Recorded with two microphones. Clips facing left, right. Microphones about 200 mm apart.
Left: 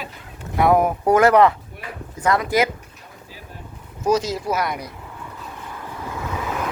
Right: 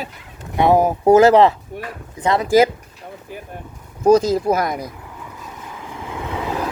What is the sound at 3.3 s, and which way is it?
Vehicle, 55° right (ahead or behind).